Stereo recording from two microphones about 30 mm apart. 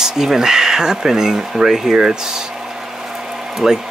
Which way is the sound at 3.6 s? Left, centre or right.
Right.